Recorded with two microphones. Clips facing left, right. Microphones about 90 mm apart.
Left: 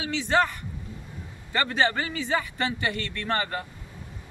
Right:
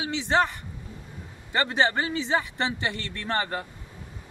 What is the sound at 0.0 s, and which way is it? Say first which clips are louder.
A man's voice: even; 25° right (ahead or behind).